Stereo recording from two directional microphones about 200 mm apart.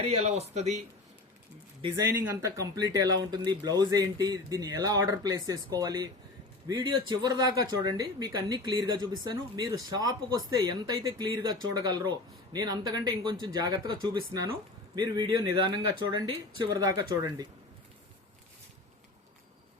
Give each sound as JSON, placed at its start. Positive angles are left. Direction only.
{"t": 0.0, "sound": "speech", "side_deg": -30}
{"t": 2.2, "sound": "speech", "side_deg": -15}